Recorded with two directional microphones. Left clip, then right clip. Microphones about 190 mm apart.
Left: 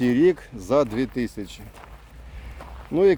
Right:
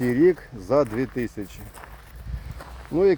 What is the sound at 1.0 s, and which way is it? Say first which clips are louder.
Speech: left 1 dB; 10° left (ahead or behind).